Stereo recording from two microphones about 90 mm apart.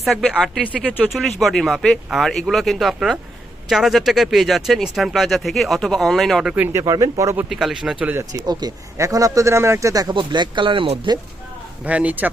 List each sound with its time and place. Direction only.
0.0 s speech: centre (ahead or behind)
6.7 s a man's voice: 40° right (ahead or behind)
7.5 s speech: 5° right (ahead or behind)
8.3 s a man's voice: 50° right (ahead or behind); by 9.9 s 30° right (ahead or behind)
9.9 s speech: 45° right (ahead or behind)
10.2 s speech: 60° right (ahead or behind)
11.9 s a man's voice: 15° right (ahead or behind)